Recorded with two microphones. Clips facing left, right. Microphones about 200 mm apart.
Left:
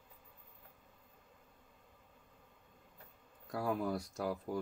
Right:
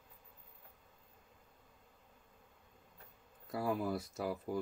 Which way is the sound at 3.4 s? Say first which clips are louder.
Even; centre (ahead or behind).